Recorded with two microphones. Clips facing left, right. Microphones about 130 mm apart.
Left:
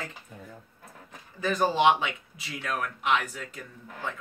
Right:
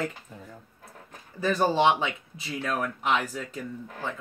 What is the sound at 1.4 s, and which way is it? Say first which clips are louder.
Speech: right 1 dB; 30° right (ahead or behind).